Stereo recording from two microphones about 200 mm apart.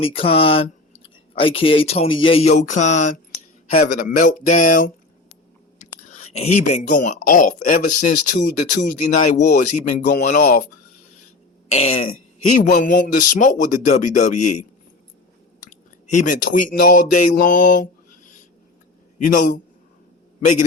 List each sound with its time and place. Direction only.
0.0 s speech: 30° left (ahead or behind)
6.1 s speech: 35° left (ahead or behind)
11.7 s speech: 30° left (ahead or behind)
15.6 s speech: 40° left (ahead or behind)
19.2 s a man's voice: 40° left (ahead or behind)